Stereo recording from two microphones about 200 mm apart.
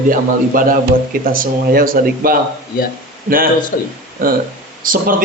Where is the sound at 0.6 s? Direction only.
45° right (ahead or behind).